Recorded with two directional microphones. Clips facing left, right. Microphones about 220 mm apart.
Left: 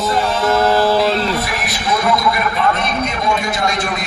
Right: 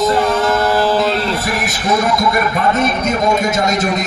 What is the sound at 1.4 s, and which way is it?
A man's voice, 45° right (ahead or behind).